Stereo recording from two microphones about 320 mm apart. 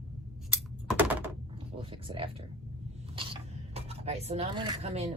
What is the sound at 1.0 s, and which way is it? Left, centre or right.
Typing, centre.